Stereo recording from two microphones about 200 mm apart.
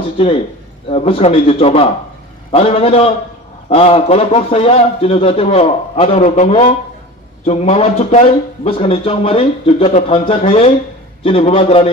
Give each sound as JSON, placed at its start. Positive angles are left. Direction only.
{"t": 0.8, "sound": "a man's voice", "side_deg": 30}